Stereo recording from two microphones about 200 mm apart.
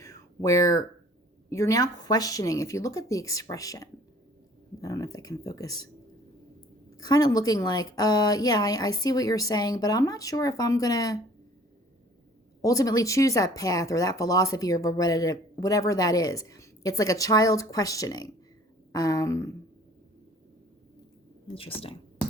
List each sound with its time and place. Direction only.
0.0 s a sound: 15° left (ahead or behind)
1.5 s speech: 15° left (ahead or behind)
6.9 s a woman's voice: 20° left (ahead or behind)
12.6 s speech: 15° left (ahead or behind)